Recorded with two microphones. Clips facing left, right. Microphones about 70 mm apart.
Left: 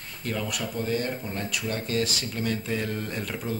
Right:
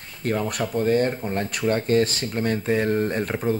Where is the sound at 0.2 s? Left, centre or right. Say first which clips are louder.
Right 6 dB; right.